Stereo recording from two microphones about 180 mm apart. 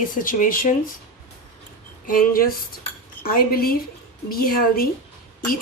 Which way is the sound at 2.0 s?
50° left (ahead or behind).